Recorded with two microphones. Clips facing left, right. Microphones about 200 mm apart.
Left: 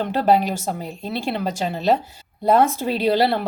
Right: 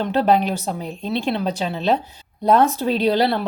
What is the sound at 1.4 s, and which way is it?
Speech, 50° left (ahead or behind).